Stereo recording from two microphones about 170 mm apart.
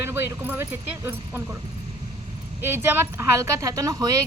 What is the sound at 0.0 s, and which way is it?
A woman's voice, 15° right (ahead or behind).